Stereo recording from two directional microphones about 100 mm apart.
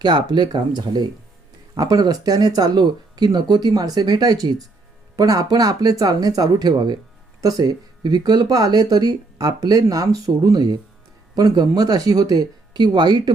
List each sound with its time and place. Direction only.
0.0 s speech: 45° right (ahead or behind)